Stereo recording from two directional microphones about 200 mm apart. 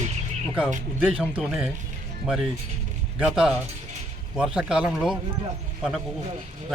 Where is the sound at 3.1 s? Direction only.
5° right (ahead or behind).